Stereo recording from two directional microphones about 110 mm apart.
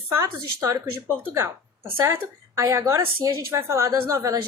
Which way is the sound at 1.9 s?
25° right (ahead or behind).